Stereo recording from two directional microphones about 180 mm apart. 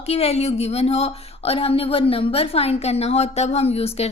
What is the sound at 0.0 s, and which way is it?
A woman's voice, 35° left (ahead or behind).